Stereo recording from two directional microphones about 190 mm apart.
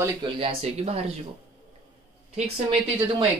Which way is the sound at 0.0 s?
25° right (ahead or behind).